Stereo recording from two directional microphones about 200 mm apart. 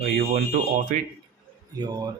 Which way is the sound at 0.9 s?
40° right (ahead or behind).